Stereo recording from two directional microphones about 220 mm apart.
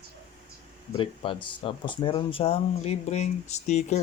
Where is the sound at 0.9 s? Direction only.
25° left (ahead or behind).